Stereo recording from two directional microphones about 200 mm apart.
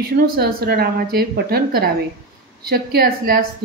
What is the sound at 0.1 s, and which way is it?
A woman's voice, 50° right (ahead or behind).